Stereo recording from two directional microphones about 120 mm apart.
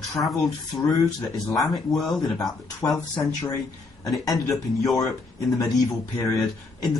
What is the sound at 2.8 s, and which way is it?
Speech, 30° left (ahead or behind).